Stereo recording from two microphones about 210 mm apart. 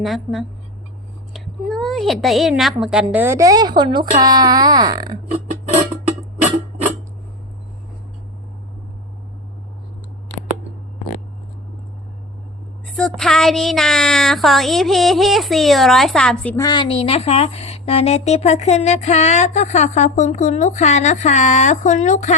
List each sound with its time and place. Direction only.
0.0 s speech: centre (ahead or behind); by 5.1 s 20° right (ahead or behind)
13.0 s speech: centre (ahead or behind)
16.6 s speech: 20° left (ahead or behind); by 22.4 s 35° left (ahead or behind)